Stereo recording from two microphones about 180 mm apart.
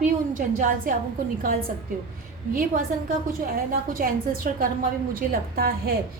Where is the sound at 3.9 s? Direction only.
55° right (ahead or behind).